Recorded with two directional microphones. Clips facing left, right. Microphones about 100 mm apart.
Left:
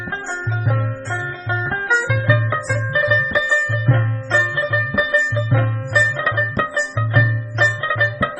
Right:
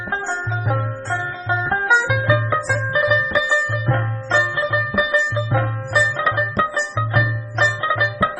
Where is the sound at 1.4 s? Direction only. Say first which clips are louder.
Right 3 dB; 20° right (ahead or behind).